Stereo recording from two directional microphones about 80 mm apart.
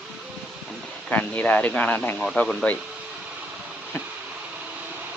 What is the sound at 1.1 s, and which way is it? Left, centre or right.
Speech, centre.